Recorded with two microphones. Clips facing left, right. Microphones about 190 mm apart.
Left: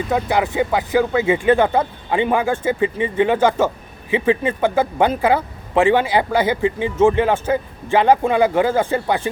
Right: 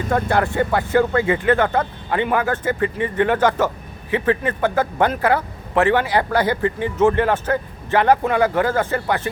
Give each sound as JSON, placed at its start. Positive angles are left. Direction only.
{"t": 0.1, "sound": "a man's voice", "side_deg": 5}
{"t": 1.4, "sound": "a man's voice", "side_deg": 20}
{"t": 7.1, "sound": "a man's voice", "side_deg": 10}